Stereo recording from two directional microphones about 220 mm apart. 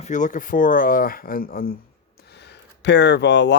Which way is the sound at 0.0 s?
35° left (ahead or behind).